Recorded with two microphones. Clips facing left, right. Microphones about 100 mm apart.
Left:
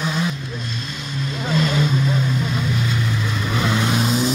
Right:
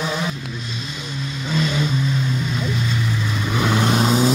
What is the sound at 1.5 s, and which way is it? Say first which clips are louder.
Vehicle: left 2 dB; centre (ahead or behind).